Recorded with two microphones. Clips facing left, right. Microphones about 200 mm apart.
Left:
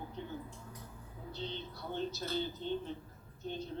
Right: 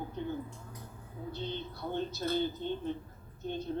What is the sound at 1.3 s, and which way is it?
Speech, 50° right (ahead or behind).